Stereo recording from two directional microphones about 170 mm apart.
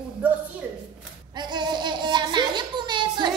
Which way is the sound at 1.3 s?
25° right (ahead or behind).